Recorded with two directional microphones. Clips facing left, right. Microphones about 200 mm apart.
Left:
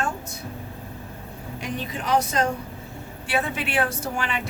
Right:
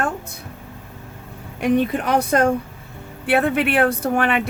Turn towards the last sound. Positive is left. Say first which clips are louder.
# right 9 dB
turn(degrees=-60)  # may be behind; listen again after turning